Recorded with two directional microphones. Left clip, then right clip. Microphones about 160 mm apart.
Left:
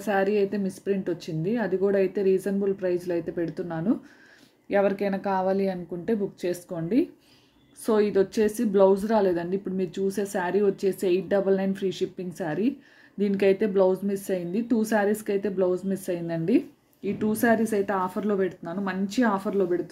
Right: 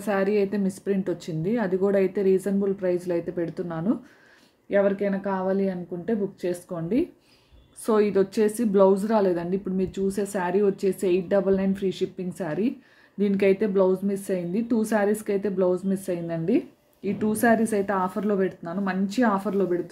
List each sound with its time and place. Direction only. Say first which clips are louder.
0.0 s a woman's voice: even; 5° left (ahead or behind)
4.6 s a woman's voice: right 1 dB; 15° left (ahead or behind)
17.0 s a woman's voice: right 2 dB; centre (ahead or behind)